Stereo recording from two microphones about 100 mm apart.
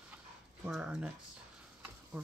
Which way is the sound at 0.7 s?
10° right (ahead or behind).